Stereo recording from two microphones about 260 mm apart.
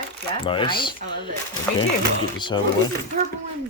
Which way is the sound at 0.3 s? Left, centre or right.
Centre.